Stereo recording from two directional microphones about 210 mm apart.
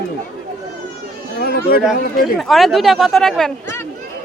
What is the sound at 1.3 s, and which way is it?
Chatter, 45° left (ahead or behind).